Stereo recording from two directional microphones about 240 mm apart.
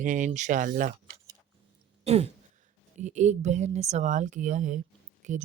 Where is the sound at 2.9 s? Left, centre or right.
Right.